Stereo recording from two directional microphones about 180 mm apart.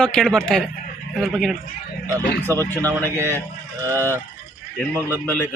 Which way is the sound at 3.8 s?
15° right (ahead or behind).